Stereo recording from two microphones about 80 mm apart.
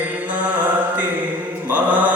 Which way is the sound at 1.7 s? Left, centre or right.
Centre.